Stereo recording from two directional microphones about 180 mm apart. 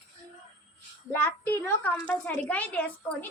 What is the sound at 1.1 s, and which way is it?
A woman's voice, 10° left (ahead or behind).